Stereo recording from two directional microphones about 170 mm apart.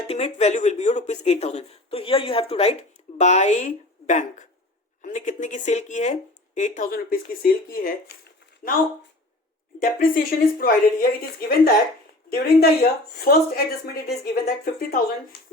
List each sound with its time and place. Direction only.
0.1 s speech: 40° left (ahead or behind); by 8.1 s 60° left (ahead or behind)
9.8 s speech: 55° left (ahead or behind)